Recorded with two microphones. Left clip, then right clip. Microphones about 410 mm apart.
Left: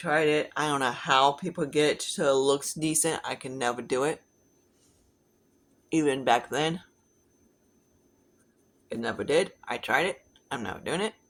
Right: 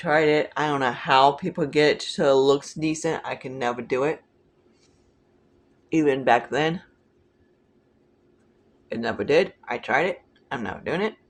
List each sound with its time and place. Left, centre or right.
0.0 s speech: left
5.9 s speech: left
8.9 s speech: left